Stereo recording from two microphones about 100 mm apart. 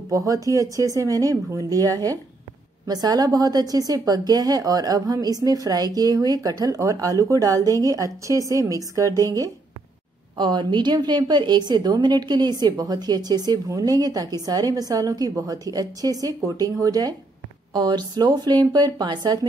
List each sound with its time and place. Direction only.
0.1 s a woman's voice: 35° right (ahead or behind)
10.3 s a woman's voice: 50° right (ahead or behind)